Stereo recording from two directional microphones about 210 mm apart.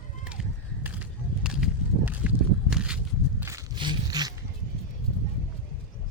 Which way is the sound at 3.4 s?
15° right (ahead or behind).